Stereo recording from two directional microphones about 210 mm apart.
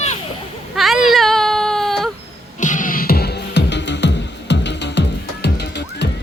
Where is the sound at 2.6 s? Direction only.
40° left (ahead or behind); by 6.1 s 55° left (ahead or behind).